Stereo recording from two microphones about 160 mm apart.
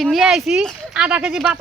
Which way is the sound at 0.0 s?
Centre (ahead or behind).